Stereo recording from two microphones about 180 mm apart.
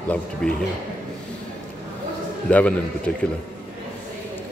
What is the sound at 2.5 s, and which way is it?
Speech, 10° left (ahead or behind).